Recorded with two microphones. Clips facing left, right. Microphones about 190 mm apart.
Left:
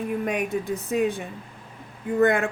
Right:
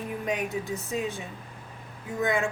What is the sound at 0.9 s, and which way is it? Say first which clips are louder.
Speech: left 9 dB; 60° left (ahead or behind).